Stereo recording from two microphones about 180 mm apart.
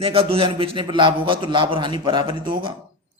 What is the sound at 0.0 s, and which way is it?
Speech, 30° right (ahead or behind).